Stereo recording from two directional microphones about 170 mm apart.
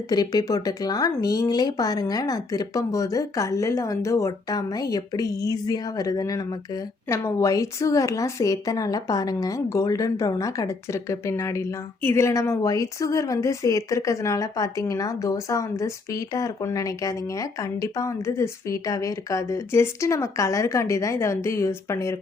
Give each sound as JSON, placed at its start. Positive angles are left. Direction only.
{"t": 0.1, "sound": "a woman's voice", "side_deg": 25}